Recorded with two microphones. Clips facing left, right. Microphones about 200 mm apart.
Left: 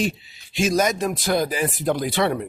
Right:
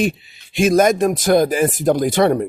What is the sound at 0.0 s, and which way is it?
A man's voice, 55° right (ahead or behind).